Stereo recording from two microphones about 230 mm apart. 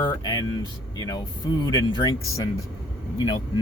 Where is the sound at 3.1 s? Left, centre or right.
Centre.